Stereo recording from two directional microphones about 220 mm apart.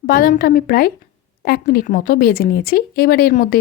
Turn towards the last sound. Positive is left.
turn(degrees=40)  # may be behind; listen again after turning